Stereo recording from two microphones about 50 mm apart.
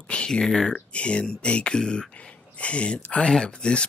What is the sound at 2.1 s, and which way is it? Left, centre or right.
Speech, left.